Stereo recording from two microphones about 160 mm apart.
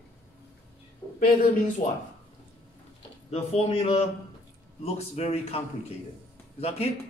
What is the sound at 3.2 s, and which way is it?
Speech, 40° left (ahead or behind).